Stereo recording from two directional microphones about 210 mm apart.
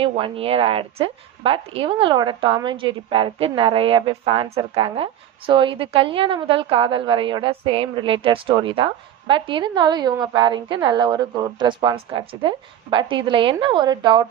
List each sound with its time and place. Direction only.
0.0 s a woman's voice: 25° right (ahead or behind)